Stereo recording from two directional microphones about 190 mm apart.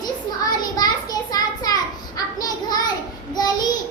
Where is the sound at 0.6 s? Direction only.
20° left (ahead or behind).